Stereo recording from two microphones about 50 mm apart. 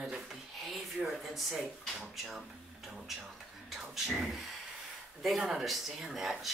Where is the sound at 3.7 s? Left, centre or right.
Centre.